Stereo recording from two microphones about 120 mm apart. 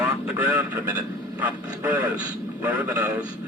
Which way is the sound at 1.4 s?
15° right (ahead or behind).